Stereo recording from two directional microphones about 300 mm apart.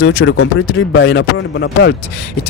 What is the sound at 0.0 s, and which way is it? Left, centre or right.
Speech, left.